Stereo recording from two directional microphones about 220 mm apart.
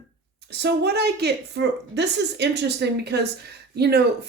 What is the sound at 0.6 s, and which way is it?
A woman's voice, 50° right (ahead or behind).